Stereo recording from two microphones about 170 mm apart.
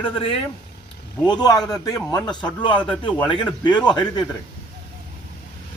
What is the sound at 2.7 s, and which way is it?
Speech, 10° left (ahead or behind).